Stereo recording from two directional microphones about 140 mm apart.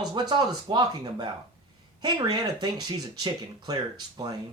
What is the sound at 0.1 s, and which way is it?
Speech, 30° right (ahead or behind).